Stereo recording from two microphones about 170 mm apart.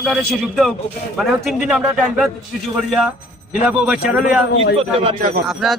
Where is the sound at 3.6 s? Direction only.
5° right (ahead or behind).